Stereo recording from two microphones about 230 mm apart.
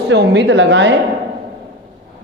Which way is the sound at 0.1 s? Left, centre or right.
Right.